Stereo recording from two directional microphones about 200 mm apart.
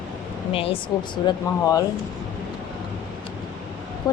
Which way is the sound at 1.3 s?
20° left (ahead or behind).